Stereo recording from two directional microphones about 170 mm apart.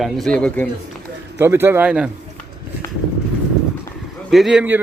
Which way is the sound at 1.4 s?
15° right (ahead or behind).